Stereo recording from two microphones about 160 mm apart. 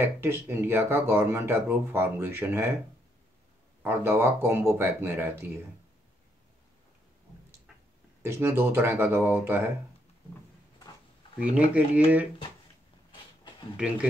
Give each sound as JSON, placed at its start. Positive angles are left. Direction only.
{"t": 0.0, "sound": "speech", "side_deg": -15}
{"t": 3.8, "sound": "speech", "side_deg": -15}
{"t": 8.2, "sound": "speech", "side_deg": -15}
{"t": 11.3, "sound": "speech", "side_deg": -10}